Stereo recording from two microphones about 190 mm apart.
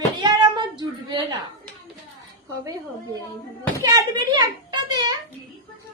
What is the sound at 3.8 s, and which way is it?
A child's voice, 20° right (ahead or behind).